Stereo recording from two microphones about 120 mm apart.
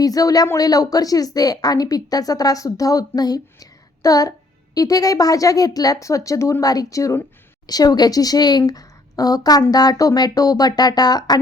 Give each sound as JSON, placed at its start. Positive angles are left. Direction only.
{"t": 0.0, "sound": "a woman's voice", "side_deg": 30}